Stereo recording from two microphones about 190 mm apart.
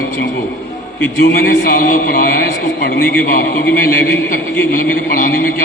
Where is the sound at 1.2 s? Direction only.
50° left (ahead or behind).